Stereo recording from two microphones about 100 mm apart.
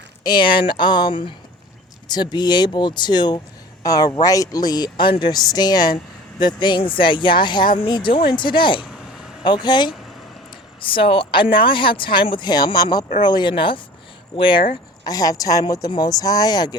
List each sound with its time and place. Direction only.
0.3 s speech: 55° left (ahead or behind)
10.8 s speech: 60° left (ahead or behind)
15.0 s speech: 40° left (ahead or behind)